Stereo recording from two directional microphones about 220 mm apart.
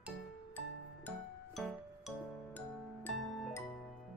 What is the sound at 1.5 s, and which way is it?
Music, centre (ahead or behind).